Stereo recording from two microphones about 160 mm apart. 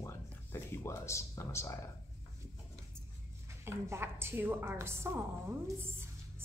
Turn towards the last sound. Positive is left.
turn(degrees=-15)  # may be behind; listen again after turning